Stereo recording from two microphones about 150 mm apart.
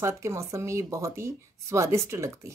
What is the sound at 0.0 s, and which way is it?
A woman's voice, 20° right (ahead or behind).